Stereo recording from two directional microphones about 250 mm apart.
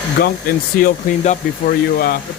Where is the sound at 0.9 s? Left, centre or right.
Left.